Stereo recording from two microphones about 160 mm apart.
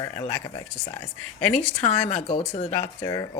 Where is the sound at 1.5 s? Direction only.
40° left (ahead or behind).